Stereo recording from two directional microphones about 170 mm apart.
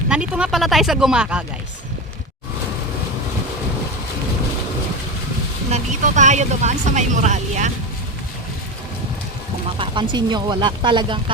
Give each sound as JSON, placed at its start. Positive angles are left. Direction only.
{"t": 0.1, "sound": "speech", "side_deg": -5}
{"t": 5.7, "sound": "speech", "side_deg": -45}
{"t": 9.7, "sound": "speech", "side_deg": -30}